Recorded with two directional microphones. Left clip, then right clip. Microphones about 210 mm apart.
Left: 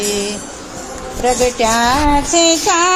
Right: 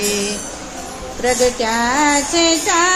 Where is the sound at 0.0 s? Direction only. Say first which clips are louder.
Left 1 dB; 15° left (ahead or behind).